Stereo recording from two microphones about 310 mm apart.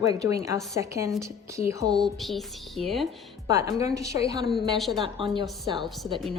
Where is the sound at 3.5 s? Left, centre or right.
Centre.